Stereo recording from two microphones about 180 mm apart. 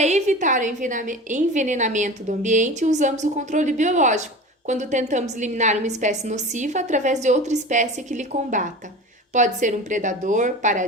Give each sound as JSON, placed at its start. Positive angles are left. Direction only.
{"t": 0.0, "sound": "a woman's voice", "side_deg": -40}